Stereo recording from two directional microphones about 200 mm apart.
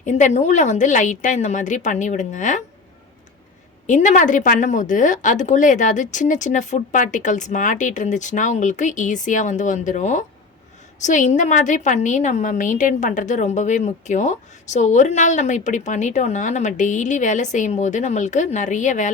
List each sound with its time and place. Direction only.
0.0 s a woman's voice: 35° left (ahead or behind)
3.8 s a woman's voice: 40° left (ahead or behind)